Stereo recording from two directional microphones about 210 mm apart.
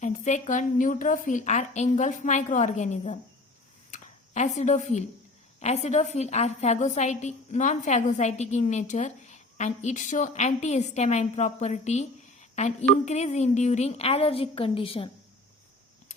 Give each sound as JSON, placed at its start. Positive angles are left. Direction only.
{"t": 0.0, "sound": "a woman's voice", "side_deg": 35}